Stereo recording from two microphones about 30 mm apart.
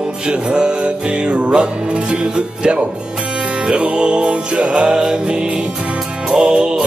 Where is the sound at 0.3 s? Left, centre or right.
Right.